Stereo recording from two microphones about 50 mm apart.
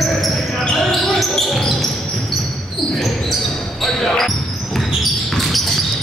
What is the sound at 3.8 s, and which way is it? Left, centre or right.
Basketball bounce, centre.